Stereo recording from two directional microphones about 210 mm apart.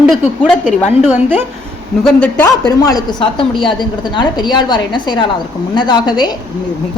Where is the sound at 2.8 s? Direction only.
20° left (ahead or behind).